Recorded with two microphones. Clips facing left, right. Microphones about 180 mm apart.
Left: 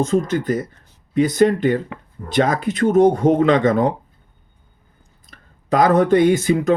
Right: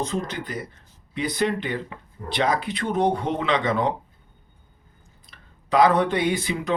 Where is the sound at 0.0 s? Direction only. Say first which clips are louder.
Left 9 dB; 45° left (ahead or behind).